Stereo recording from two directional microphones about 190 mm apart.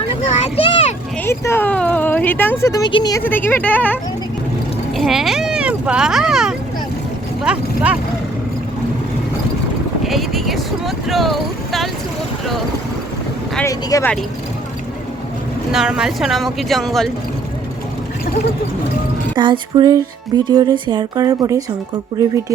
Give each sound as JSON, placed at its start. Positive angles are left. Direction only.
{"t": 0.3, "sound": "vehicle", "side_deg": 35}
{"t": 1.2, "sound": "speech", "side_deg": 10}
{"t": 3.2, "sound": "speech", "side_deg": 10}
{"t": 4.9, "sound": "speech", "side_deg": 0}
{"t": 10.0, "sound": "speech", "side_deg": 0}
{"t": 13.7, "sound": "speech", "side_deg": 15}
{"t": 15.7, "sound": "speech", "side_deg": -5}
{"t": 19.4, "sound": "speech", "side_deg": -25}